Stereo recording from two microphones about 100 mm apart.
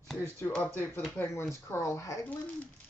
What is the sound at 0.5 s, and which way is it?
Speech, 15° left (ahead or behind).